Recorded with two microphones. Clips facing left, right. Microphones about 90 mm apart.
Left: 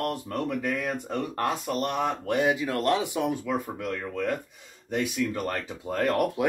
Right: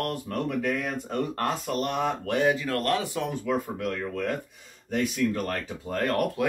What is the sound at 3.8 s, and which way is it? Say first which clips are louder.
Speech: even; centre (ahead or behind).